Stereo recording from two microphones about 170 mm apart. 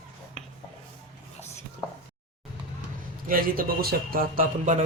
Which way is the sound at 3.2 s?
60° right (ahead or behind).